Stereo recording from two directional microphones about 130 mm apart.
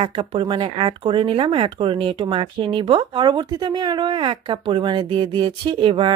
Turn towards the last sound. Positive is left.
turn(degrees=-40)  # may be behind; listen again after turning